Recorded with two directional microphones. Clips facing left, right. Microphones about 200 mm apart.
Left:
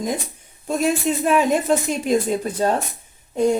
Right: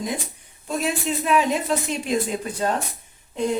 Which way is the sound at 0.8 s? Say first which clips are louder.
Left 5 dB; 45° left (ahead or behind).